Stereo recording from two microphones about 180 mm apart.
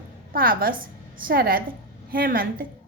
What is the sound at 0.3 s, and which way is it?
A woman's voice, 55° right (ahead or behind).